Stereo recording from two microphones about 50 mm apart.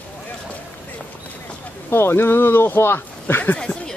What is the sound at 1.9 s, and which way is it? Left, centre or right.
Speech, left.